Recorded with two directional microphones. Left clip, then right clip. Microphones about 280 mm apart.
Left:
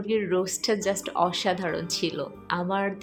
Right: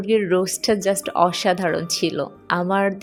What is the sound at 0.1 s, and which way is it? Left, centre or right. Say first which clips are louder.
Speech: right 7 dB; right.